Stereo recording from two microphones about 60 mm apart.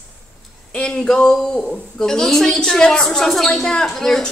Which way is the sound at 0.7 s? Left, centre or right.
Centre.